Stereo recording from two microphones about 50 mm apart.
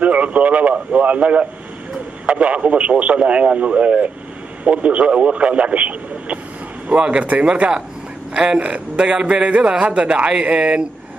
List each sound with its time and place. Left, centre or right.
0.0 s a man's voice: right